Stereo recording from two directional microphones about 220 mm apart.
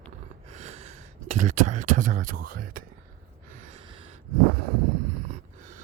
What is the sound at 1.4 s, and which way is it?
Speech, 35° right (ahead or behind).